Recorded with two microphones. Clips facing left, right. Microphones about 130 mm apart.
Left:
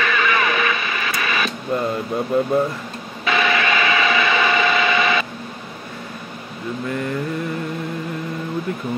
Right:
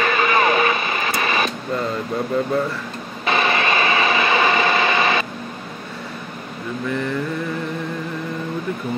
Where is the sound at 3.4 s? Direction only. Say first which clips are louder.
Even; 30° right (ahead or behind).